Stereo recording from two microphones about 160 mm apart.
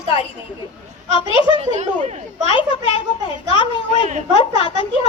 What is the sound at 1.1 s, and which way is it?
Speech, 35° left (ahead or behind).